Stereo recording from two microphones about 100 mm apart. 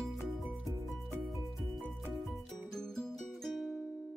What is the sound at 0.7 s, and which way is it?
Music, 35° right (ahead or behind).